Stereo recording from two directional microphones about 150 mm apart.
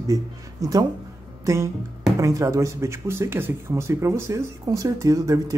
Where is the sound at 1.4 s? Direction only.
20° right (ahead or behind).